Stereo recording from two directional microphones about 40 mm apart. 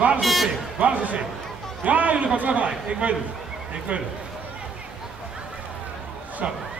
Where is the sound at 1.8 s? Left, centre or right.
Right.